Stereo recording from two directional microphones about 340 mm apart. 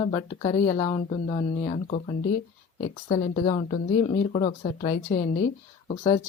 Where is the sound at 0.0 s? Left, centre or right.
Centre.